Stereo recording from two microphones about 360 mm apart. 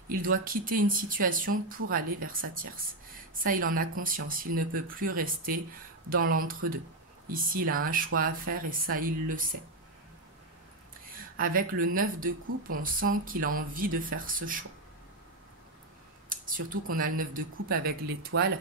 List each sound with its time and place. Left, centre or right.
0.1 s speech: right
11.1 s speech: right
16.3 s speech: right